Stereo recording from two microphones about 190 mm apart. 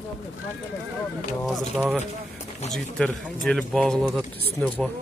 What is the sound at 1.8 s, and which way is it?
Speech, 10° right (ahead or behind).